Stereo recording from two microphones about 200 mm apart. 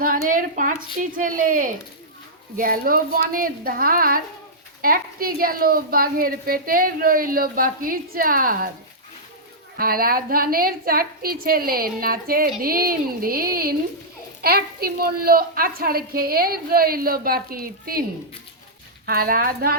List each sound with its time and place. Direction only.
0.0 s a woman's voice: 45° right (ahead or behind)
9.7 s a woman's voice: 45° right (ahead or behind)
19.0 s a woman's voice: 45° right (ahead or behind)